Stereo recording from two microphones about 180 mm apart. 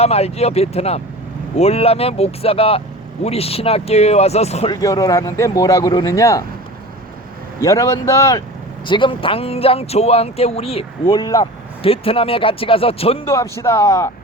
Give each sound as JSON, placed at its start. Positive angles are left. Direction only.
{"t": 0.0, "sound": "speech", "side_deg": 35}
{"t": 4.7, "sound": "speech", "side_deg": 20}
{"t": 7.6, "sound": "speech", "side_deg": 15}
{"t": 8.9, "sound": "speech", "side_deg": 25}
{"t": 13.2, "sound": "speech", "side_deg": 15}